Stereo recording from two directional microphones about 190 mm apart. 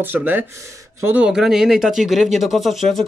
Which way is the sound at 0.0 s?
10° right (ahead or behind).